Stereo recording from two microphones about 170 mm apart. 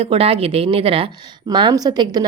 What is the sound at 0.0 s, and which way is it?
A woman's voice, 35° right (ahead or behind).